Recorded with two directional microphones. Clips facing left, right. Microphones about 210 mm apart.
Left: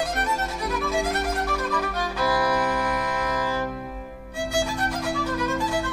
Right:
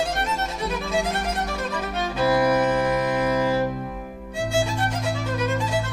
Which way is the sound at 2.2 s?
25° right (ahead or behind).